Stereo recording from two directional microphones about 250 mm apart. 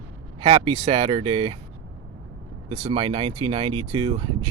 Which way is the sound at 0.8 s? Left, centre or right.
Right.